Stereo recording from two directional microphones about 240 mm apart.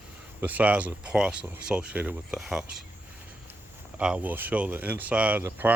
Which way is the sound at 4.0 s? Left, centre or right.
Centre.